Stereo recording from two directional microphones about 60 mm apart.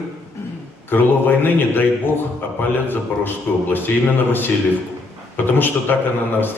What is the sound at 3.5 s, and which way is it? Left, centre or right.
Speech, left.